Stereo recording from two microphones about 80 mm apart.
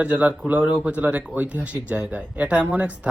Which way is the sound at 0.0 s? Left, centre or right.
Centre.